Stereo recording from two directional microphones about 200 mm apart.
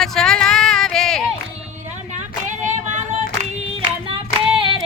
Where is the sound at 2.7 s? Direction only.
40° right (ahead or behind).